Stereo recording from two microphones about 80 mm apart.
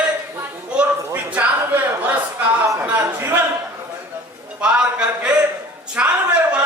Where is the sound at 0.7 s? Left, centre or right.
Centre.